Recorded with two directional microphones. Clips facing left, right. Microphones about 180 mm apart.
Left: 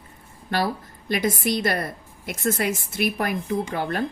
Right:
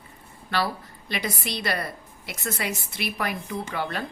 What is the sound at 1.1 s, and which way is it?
A woman's voice, 50° left (ahead or behind).